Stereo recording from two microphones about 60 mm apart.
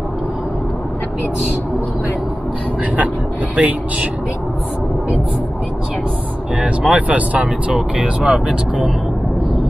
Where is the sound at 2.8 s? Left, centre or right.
Right.